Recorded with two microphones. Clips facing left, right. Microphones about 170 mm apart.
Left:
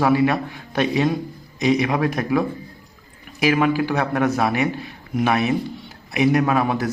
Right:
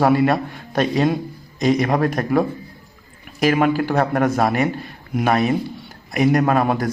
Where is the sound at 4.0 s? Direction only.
50° right (ahead or behind).